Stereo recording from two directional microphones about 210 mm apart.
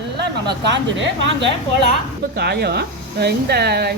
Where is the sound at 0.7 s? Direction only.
60° right (ahead or behind).